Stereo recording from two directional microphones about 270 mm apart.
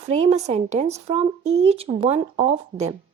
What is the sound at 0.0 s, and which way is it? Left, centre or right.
Speech, right.